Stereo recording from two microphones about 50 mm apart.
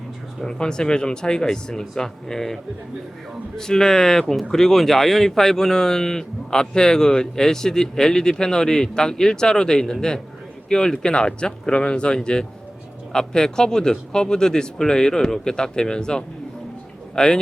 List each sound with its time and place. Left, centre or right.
0.4 s speech: centre
3.6 s speech: centre